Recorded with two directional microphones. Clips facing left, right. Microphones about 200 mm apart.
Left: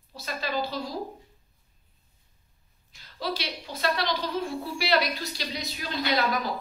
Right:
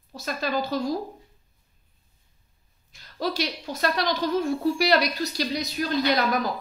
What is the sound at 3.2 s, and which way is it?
A woman's voice, 45° right (ahead or behind).